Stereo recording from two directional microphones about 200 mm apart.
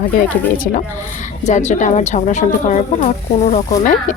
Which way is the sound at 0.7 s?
45° left (ahead or behind).